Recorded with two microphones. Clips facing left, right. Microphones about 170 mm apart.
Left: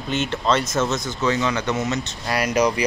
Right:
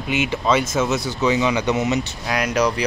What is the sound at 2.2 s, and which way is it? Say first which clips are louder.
Speech: left 1 dB; 5° left (ahead or behind).